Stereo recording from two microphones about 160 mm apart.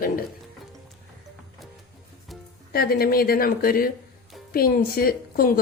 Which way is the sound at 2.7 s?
70° left (ahead or behind).